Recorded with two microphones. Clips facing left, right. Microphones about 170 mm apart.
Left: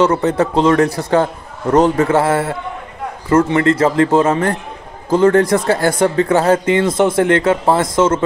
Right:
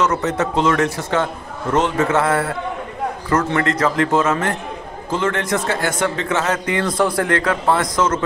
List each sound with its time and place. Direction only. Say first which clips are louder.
0.0 s a man's voice: left 5 dB; 30° left (ahead or behind)